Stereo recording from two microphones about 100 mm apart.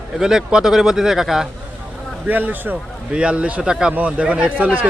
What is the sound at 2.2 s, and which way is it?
A man's voice, 15° right (ahead or behind).